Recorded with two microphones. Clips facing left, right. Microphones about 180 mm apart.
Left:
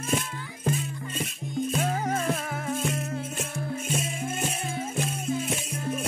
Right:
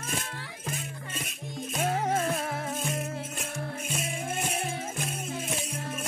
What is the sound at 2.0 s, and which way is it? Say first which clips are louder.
Music: even; 25° right (ahead or behind).